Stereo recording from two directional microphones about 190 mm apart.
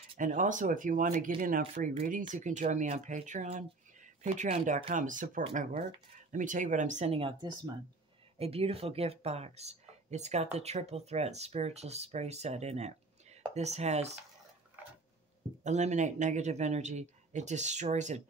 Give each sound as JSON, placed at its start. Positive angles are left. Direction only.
{"t": 0.2, "sound": "speech", "side_deg": -45}
{"t": 15.6, "sound": "speech", "side_deg": -35}